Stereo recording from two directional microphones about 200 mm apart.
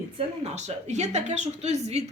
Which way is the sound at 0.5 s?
35° right (ahead or behind).